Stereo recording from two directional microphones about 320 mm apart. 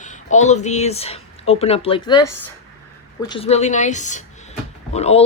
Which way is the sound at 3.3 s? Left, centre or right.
Centre.